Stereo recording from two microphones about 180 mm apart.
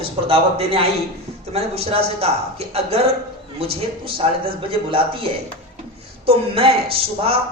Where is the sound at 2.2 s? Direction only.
35° right (ahead or behind).